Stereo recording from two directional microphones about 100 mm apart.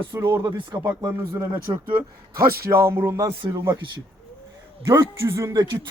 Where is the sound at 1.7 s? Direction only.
45° right (ahead or behind).